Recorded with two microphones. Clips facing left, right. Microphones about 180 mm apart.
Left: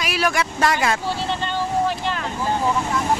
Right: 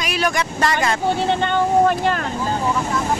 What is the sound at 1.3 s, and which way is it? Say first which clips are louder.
Speech: right 6 dB; 60° right (ahead or behind).